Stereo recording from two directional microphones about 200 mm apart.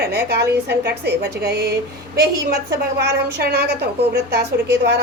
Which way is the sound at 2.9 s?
55° right (ahead or behind).